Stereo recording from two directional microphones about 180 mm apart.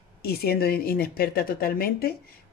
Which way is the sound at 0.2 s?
60° left (ahead or behind).